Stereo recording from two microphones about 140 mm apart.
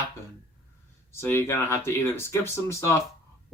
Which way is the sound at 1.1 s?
20° left (ahead or behind).